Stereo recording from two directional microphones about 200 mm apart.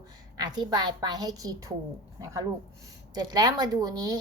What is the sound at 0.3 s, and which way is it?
Speech, 20° right (ahead or behind).